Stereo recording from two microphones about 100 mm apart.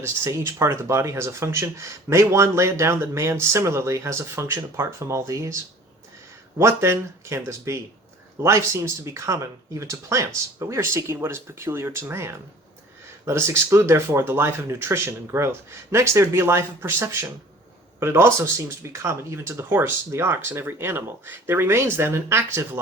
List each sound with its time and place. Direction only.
0.0 s speech: 25° right (ahead or behind)
6.6 s speech: 25° right (ahead or behind)